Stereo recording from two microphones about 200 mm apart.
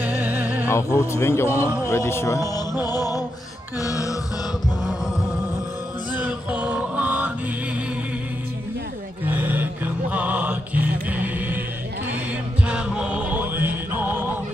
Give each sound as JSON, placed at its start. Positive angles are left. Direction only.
{"t": 0.0, "sound": "music", "side_deg": -10}
{"t": 0.7, "sound": "speech", "side_deg": 15}
{"t": 6.1, "sound": "male singing", "side_deg": -5}
{"t": 9.2, "sound": "music", "side_deg": -10}
{"t": 12.6, "sound": "music", "side_deg": -5}